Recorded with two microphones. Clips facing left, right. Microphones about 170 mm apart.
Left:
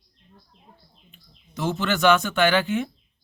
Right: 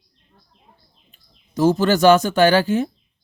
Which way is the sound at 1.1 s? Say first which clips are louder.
Left 4 dB; 40° right (ahead or behind).